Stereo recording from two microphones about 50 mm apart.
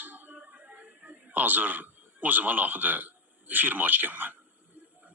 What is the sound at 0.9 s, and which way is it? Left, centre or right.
A man's voice, right.